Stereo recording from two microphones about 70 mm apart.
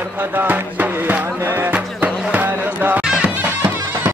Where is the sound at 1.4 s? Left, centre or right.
Right.